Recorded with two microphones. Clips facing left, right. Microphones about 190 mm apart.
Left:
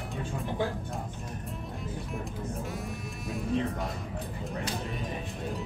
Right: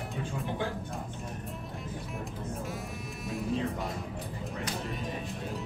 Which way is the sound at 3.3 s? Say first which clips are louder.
Left 2 dB; centre (ahead or behind).